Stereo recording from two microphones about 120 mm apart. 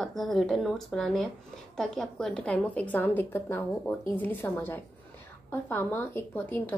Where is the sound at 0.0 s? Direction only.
Centre (ahead or behind).